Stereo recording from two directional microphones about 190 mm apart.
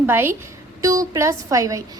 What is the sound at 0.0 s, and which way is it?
A woman's voice, 10° right (ahead or behind).